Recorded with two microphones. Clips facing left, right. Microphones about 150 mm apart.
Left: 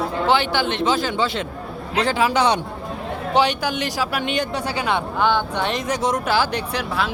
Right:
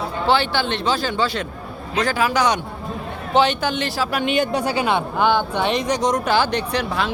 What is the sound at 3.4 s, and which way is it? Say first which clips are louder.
Speech: right 2 dB; 10° left (ahead or behind).